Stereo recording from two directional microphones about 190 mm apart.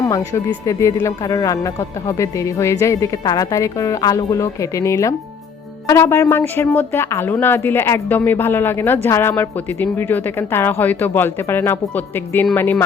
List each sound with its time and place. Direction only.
0.0 s speech: 15° left (ahead or behind)